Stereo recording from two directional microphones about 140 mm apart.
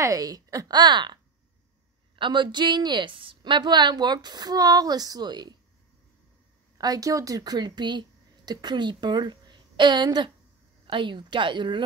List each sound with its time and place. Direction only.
0.0 s a woman's voice: 25° right (ahead or behind)
6.8 s a woman's voice: 25° right (ahead or behind)